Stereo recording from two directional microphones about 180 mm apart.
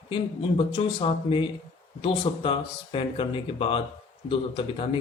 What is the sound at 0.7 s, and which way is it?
A man's voice, 30° left (ahead or behind).